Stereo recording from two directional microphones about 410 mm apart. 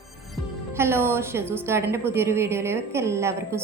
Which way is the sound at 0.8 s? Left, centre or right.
Centre.